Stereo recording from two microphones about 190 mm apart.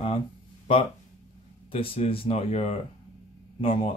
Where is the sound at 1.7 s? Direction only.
30° left (ahead or behind).